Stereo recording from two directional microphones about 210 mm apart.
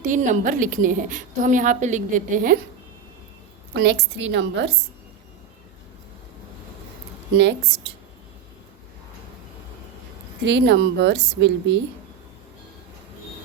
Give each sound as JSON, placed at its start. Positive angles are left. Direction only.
{"t": 0.0, "sound": "a woman's voice", "side_deg": -35}
{"t": 3.8, "sound": "speech", "side_deg": -50}
{"t": 10.4, "sound": "speech", "side_deg": -55}